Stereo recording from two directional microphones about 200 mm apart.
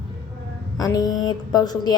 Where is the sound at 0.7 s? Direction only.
20° left (ahead or behind).